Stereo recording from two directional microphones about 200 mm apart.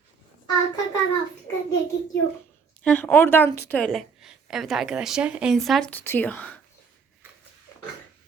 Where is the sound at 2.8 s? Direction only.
5° left (ahead or behind).